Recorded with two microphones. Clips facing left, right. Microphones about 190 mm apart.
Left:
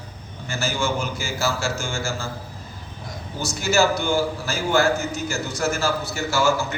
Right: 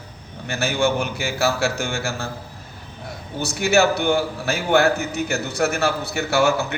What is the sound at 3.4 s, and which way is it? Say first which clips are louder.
A man's voice: right 3 dB; 60° right (ahead or behind).